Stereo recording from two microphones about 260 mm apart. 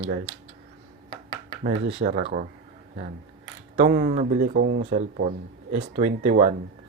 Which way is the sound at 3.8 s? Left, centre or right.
Right.